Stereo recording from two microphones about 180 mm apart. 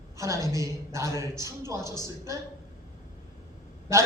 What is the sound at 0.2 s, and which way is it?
Speech, 15° right (ahead or behind).